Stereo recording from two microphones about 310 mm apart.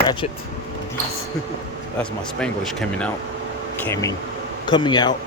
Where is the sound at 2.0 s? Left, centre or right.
Centre.